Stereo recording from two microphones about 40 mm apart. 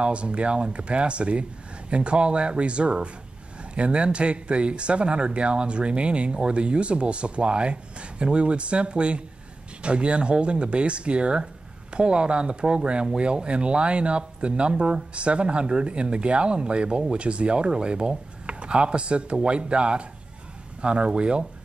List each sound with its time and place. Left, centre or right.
0.0 s speech: right